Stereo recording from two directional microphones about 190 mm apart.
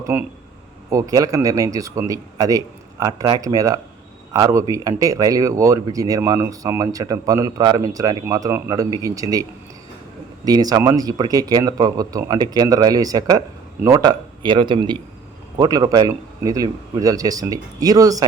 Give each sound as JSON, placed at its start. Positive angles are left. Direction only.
{"t": 0.0, "sound": "a man's voice", "side_deg": -10}